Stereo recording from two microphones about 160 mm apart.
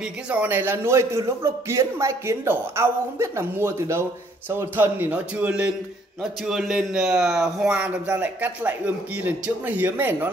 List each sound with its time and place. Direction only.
0.3 s speech: 10° right (ahead or behind)